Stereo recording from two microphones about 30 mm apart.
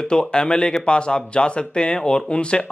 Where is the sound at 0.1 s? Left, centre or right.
Left.